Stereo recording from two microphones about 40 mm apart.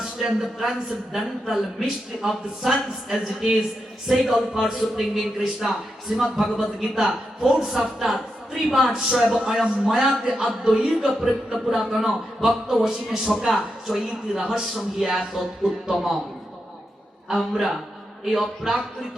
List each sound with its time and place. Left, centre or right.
0.3 s a man's voice: centre
10.2 s a man's voice: right; by 16.1 s centre
17.2 s a man's voice: centre